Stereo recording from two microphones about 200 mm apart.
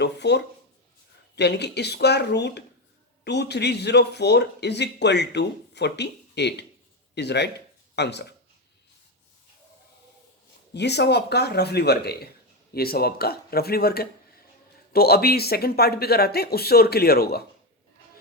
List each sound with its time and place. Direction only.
0.0 s speech: 60° left (ahead or behind)
10.8 s speech: 55° left (ahead or behind)